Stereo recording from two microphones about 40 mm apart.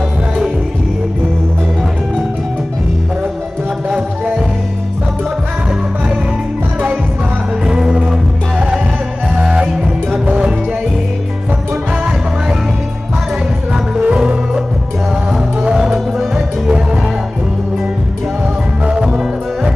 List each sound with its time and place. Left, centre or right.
7.6 s music: centre
14.0 s music: right
15.7 s music: centre
18.9 s music: right